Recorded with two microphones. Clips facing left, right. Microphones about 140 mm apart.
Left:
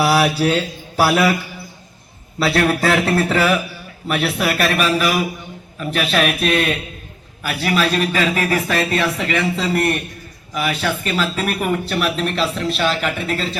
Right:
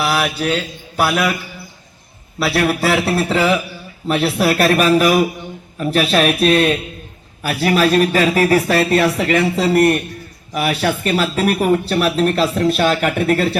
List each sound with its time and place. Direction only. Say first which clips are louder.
0.0 s mantra: left 3 dB; 10° left (ahead or behind)
2.4 s speech: even; 5° right (ahead or behind)
4.1 s speech: right 4 dB; 35° right (ahead or behind); by 13.6 s 60° right (ahead or behind)